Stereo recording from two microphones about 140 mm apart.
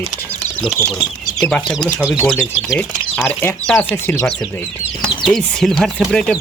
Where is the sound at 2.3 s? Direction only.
5° left (ahead or behind).